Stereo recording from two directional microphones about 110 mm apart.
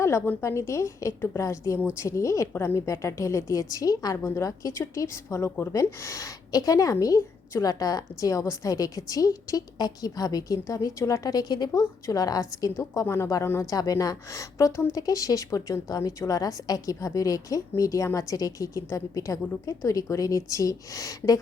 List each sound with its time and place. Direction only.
0.0 s a woman's voice: 25° left (ahead or behind)